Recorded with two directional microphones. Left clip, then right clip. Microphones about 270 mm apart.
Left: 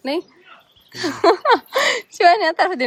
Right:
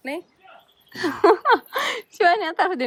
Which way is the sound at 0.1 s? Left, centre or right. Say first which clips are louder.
Left 8 dB; left.